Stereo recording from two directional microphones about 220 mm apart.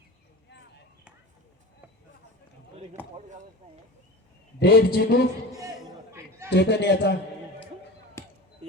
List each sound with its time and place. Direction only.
3.0 s a sound: 10° left (ahead or behind)
4.6 s a man's voice: 45° left (ahead or behind)
5.5 s chatter: 15° right (ahead or behind)
6.5 s a man's voice: 50° left (ahead or behind)
8.2 s basketball bounce: 10° left (ahead or behind)